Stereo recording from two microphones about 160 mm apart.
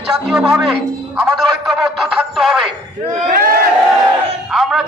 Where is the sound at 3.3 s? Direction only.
60° right (ahead or behind).